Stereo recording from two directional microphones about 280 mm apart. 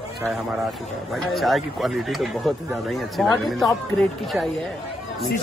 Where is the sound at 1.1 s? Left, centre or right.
Centre.